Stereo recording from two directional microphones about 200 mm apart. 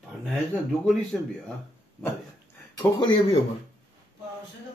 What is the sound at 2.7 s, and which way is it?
Speech, 25° left (ahead or behind).